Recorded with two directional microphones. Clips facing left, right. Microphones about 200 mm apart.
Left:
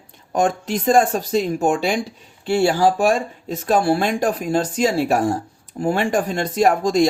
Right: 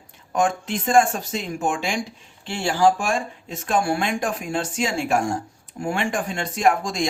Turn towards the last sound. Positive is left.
turn(degrees=40)  # may be behind; listen again after turning